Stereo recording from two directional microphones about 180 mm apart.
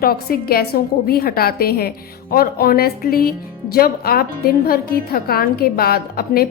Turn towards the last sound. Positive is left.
turn(degrees=55)  # may be behind; listen again after turning